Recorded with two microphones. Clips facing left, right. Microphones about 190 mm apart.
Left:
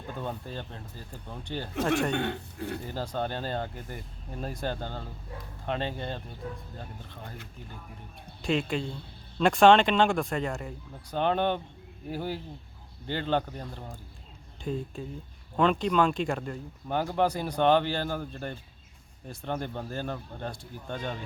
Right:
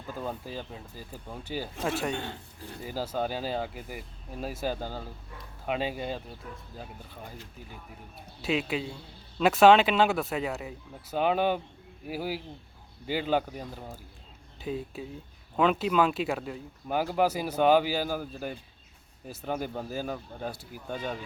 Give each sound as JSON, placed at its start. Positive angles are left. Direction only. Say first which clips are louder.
{"t": 0.2, "sound": "speech", "louder": "right 1 dB", "side_deg": -5}
{"t": 2.1, "sound": "speech", "louder": "left 6 dB", "side_deg": 65}
{"t": 2.8, "sound": "speech", "louder": "right 5 dB", "side_deg": -5}
{"t": 8.4, "sound": "speech", "louder": "left 1 dB", "side_deg": -5}